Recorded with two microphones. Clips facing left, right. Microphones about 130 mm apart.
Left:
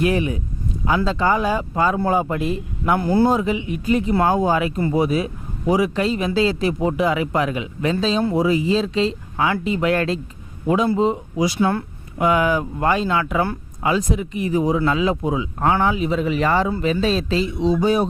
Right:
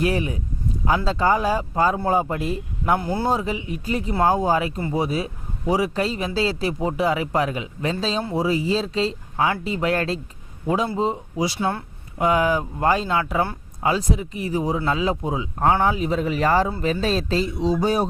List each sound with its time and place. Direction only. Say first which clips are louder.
0.0 s a man's voice: left 3 dB; 35° right (ahead or behind)